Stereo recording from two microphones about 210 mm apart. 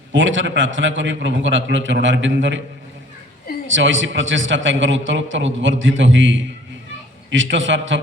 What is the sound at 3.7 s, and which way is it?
A man's voice, 65° right (ahead or behind).